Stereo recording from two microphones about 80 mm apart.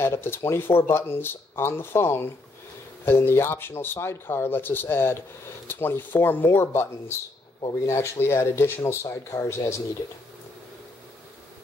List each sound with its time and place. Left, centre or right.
0.0 s speech: left